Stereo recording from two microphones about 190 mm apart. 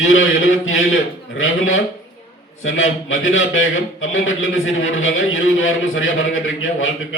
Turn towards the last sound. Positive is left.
turn(degrees=90)